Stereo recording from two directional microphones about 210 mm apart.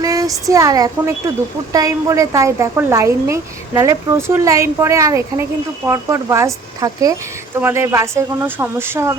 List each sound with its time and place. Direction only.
0.0 s a woman's voice: 15° right (ahead or behind)